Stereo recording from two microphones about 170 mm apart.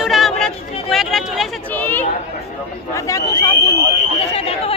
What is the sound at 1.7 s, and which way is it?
Chatter, 10° left (ahead or behind).